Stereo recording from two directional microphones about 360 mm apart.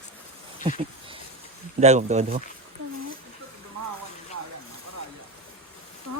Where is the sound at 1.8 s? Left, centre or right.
Centre.